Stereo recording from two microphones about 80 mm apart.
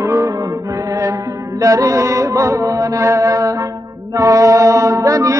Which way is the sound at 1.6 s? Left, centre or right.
Right.